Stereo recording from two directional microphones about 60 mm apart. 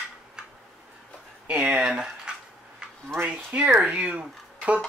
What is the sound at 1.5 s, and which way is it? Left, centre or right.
Speech, centre.